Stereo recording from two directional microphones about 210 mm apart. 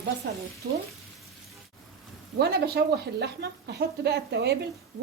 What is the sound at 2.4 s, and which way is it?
Speech, 50° right (ahead or behind).